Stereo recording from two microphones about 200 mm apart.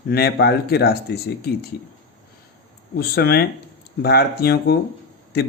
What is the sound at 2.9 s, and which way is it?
Speech, 50° left (ahead or behind).